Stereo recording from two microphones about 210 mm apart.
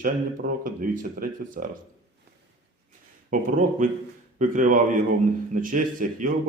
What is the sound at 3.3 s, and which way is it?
Speech, 40° right (ahead or behind).